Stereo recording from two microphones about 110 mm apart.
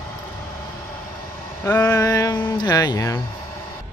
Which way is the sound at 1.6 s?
20° left (ahead or behind).